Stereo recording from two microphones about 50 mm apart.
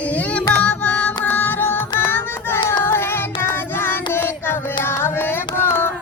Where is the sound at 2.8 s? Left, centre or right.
Left.